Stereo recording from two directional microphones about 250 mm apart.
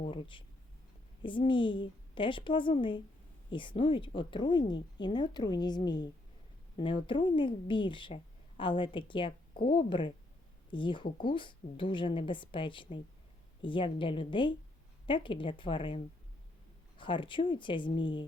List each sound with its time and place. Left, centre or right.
0.0 s a woman's voice: left